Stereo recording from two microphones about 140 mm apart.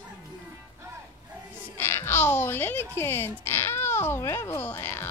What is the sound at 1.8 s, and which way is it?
Speech, 15° left (ahead or behind).